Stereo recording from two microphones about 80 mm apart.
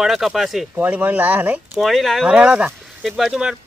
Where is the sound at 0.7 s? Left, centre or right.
Right.